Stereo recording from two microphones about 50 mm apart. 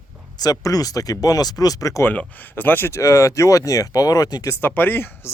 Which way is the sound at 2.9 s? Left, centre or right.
Left.